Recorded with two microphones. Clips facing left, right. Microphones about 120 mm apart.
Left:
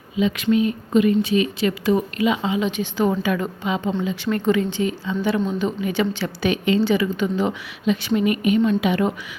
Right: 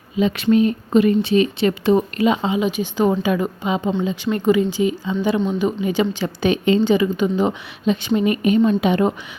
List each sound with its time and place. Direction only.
0.2 s speech: 40° right (ahead or behind)
2.5 s a woman's voice: 15° right (ahead or behind)
8.0 s a woman's voice: 30° right (ahead or behind)